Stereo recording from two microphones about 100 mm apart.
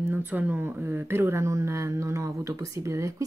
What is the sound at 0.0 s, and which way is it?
Speech, 20° right (ahead or behind).